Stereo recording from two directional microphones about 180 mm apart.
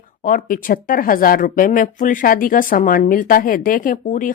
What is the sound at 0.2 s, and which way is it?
Speech, 50° left (ahead or behind).